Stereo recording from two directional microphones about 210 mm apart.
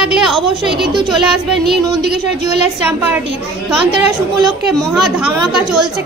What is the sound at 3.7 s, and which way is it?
Speech, 5° right (ahead or behind).